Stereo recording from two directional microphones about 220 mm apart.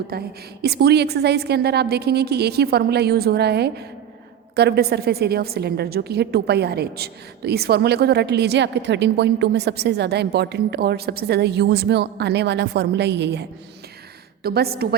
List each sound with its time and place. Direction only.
0.1 s a woman's voice: 45° right (ahead or behind)
14.4 s a woman's voice: 45° right (ahead or behind)